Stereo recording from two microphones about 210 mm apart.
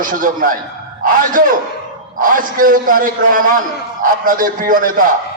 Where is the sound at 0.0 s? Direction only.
40° right (ahead or behind).